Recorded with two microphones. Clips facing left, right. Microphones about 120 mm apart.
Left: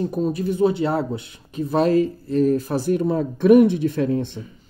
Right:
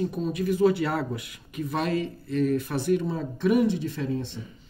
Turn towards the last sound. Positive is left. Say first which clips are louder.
# left 8 dB
turn(degrees=60)  # may be behind; listen again after turning